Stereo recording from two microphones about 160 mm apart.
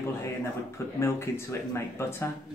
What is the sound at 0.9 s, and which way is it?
Speech, 15° left (ahead or behind).